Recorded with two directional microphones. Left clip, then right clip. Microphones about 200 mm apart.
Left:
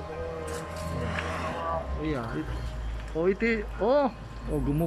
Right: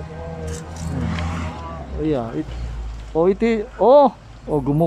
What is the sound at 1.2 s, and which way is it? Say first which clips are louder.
Music: right 3 dB; 45° right (ahead or behind).